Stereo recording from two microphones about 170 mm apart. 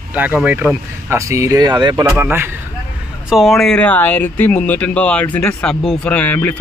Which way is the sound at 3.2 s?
Centre (ahead or behind).